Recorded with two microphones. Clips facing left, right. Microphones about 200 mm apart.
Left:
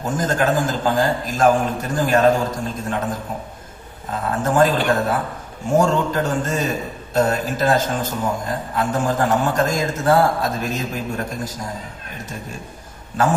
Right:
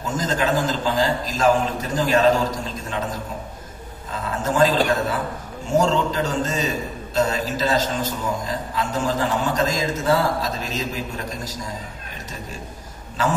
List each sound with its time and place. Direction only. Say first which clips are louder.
0.0 s a man's voice: left 3 dB; 50° left (ahead or behind)
4.4 s a man's voice: left 1 dB; 55° left (ahead or behind)